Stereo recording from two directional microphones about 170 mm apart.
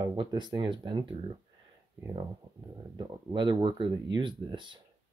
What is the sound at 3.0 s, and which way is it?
Speech, 25° right (ahead or behind).